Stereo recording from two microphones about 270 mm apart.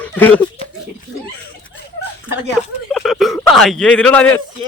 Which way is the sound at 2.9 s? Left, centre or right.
Centre.